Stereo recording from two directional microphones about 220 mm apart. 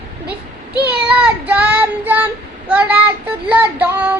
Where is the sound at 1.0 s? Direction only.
5° right (ahead or behind).